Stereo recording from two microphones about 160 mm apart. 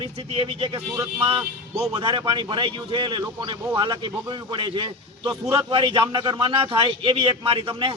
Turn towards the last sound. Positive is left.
turn(degrees=-35)  # may be behind; listen again after turning